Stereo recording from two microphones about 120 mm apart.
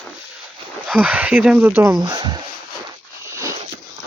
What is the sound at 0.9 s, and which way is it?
Speech, 15° right (ahead or behind).